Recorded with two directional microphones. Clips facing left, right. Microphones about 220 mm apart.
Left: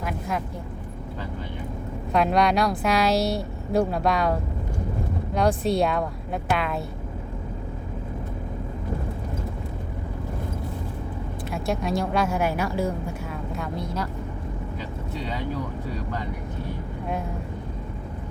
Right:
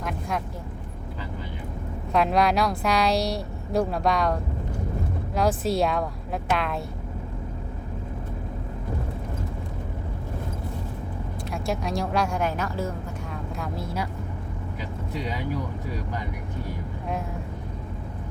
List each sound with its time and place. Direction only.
0.0 s vehicle: centre (ahead or behind)
2.1 s speech: centre (ahead or behind)
11.5 s speech: centre (ahead or behind)
13.6 s speech: 5° right (ahead or behind)